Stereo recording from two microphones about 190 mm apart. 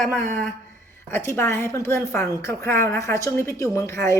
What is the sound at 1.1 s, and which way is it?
A woman's voice, 10° left (ahead or behind).